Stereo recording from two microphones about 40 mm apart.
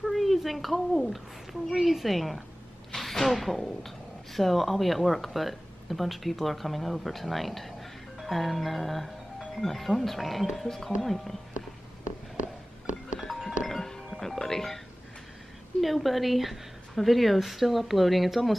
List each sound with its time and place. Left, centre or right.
0.0 s a woman's voice: centre
11.5 s a sound: right
13.2 s music: centre
15.8 s a woman's voice: centre